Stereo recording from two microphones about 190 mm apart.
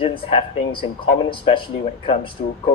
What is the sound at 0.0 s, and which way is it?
Speech, 30° left (ahead or behind).